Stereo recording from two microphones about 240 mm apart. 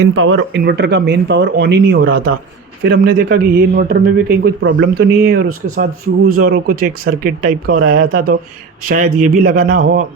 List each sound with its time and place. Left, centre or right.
0.2 s speech: right
0.5 s a man's voice: right